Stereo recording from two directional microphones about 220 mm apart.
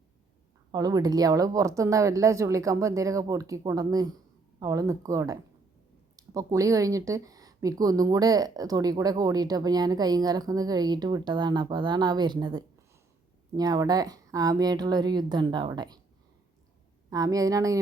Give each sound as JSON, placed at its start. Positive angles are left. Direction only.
{"t": 0.7, "sound": "a woman's voice", "side_deg": -15}
{"t": 17.1, "sound": "a woman's voice", "side_deg": -15}